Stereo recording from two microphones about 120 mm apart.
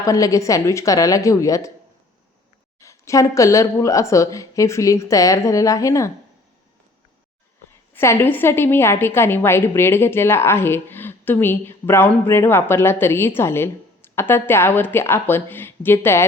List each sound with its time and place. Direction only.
0.0 s a woman's voice: 30° left (ahead or behind)
2.8 s a woman's voice: 25° left (ahead or behind)
7.9 s a woman's voice: 20° left (ahead or behind)